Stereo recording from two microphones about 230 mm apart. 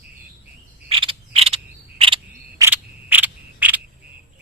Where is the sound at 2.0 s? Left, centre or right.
Right.